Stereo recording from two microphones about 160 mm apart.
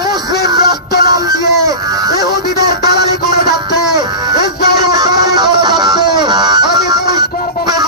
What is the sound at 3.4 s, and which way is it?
Music, 25° right (ahead or behind).